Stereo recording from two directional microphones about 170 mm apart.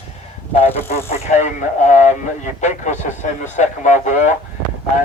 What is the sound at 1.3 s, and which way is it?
Speech, 45° left (ahead or behind).